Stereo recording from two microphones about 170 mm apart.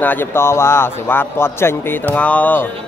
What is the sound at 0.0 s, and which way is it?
A man's voice, 10° left (ahead or behind).